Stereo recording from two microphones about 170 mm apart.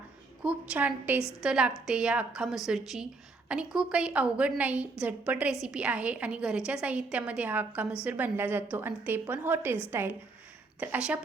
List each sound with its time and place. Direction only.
0.4 s a woman's voice: 10° right (ahead or behind)